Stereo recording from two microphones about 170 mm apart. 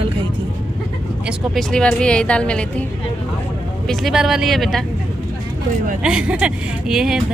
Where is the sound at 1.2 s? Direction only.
Centre (ahead or behind).